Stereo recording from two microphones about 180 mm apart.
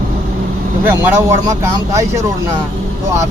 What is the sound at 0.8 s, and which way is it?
A man's voice, 15° right (ahead or behind).